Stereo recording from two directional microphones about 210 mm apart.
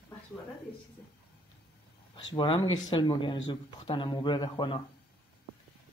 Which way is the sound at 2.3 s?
20° left (ahead or behind).